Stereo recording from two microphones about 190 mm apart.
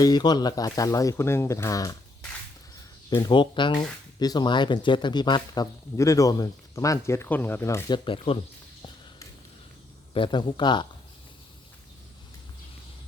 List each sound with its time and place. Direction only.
0.0 s speech: 20° left (ahead or behind)
3.1 s speech: 25° left (ahead or behind)
10.2 s speech: 25° left (ahead or behind)